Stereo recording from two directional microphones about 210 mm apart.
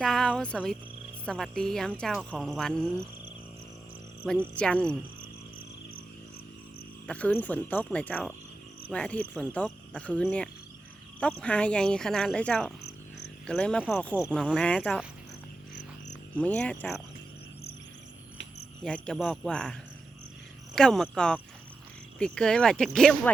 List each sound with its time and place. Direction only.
0.0 s speech: 5° left (ahead or behind)
4.2 s speech: 5° left (ahead or behind)
7.1 s cricket: 10° left (ahead or behind)
8.9 s speech: 5° left (ahead or behind)
12.8 s cricket: 55° left (ahead or behind)
13.5 s speech: 5° left (ahead or behind)
16.3 s speech: 5° left (ahead or behind)
18.8 s speech: 5° left (ahead or behind)
20.7 s speech: centre (ahead or behind)